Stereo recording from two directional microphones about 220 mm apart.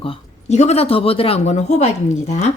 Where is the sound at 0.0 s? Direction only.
30° left (ahead or behind).